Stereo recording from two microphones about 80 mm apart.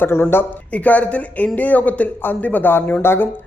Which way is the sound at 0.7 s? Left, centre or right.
Centre.